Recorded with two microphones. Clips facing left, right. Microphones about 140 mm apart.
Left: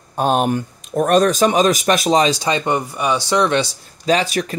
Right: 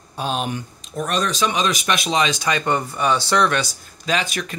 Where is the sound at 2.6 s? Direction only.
15° left (ahead or behind).